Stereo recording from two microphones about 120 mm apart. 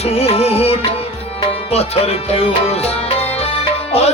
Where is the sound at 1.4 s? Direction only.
55° left (ahead or behind).